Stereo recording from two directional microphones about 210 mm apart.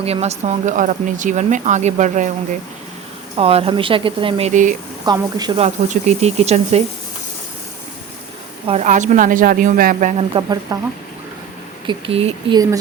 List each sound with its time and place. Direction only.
0.0 s speech: 30° right (ahead or behind)
3.3 s speech: 25° right (ahead or behind)
5.0 s speech: 20° right (ahead or behind)
8.6 s speech: 30° right (ahead or behind)
10.3 s speech: 20° right (ahead or behind)
11.9 s speech: 25° right (ahead or behind)